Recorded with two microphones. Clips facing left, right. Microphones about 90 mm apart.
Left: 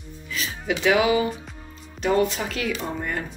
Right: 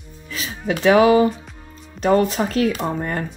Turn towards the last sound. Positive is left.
turn(degrees=-40)  # may be behind; listen again after turning